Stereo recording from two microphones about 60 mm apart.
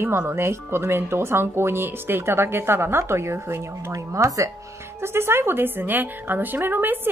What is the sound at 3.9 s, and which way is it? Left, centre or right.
Speech, right.